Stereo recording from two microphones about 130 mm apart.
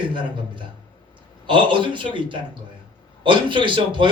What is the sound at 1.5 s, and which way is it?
A man's voice, 40° right (ahead or behind).